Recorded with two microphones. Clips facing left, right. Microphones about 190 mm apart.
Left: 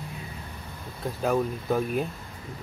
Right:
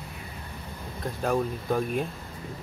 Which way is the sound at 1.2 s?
Centre (ahead or behind).